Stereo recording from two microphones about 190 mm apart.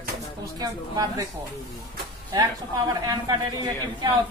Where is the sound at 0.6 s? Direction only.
20° right (ahead or behind).